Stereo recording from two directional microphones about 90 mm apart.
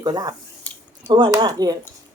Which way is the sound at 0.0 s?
50° right (ahead or behind).